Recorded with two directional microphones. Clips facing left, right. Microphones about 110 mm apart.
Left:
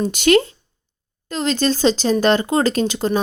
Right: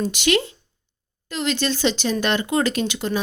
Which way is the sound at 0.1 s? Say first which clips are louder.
Left 6 dB; 45° left (ahead or behind).